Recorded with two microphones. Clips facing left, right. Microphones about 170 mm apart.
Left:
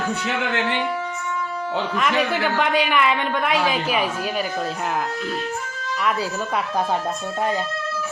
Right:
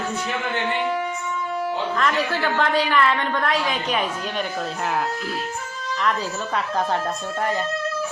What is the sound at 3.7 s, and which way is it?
Speech, 5° left (ahead or behind).